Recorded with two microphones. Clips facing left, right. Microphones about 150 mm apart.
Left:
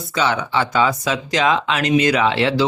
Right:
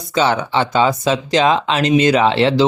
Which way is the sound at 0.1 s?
30° right (ahead or behind).